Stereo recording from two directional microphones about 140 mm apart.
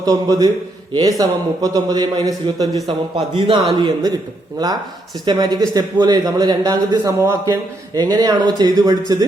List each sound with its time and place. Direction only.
0.0 s a man's voice: 25° right (ahead or behind)
5.2 s a man's voice: 30° right (ahead or behind)